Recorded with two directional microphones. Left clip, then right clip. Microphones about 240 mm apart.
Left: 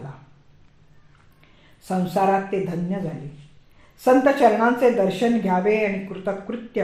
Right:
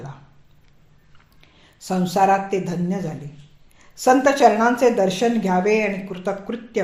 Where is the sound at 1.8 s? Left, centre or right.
Right.